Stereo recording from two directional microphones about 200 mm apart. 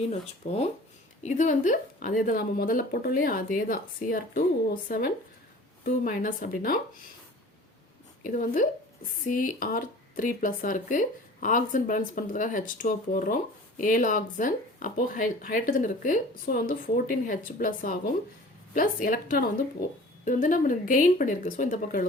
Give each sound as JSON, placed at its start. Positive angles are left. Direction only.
{"t": 0.1, "sound": "speech", "side_deg": 30}
{"t": 8.2, "sound": "speech", "side_deg": 40}